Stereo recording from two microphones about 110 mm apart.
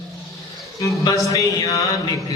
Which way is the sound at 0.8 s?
30° left (ahead or behind).